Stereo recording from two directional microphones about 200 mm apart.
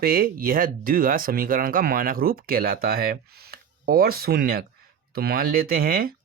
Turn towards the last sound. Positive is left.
turn(degrees=-50)  # may be behind; listen again after turning